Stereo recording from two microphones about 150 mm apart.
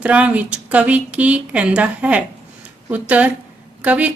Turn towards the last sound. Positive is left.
turn(degrees=-10)  # may be behind; listen again after turning